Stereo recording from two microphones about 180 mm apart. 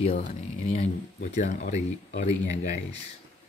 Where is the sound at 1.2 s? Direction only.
40° left (ahead or behind).